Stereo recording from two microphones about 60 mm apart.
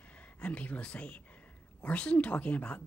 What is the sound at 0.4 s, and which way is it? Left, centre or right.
A woman's voice, left.